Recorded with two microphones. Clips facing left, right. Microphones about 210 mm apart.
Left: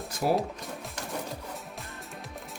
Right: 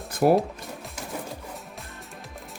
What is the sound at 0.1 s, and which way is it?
Music, 55° right (ahead or behind).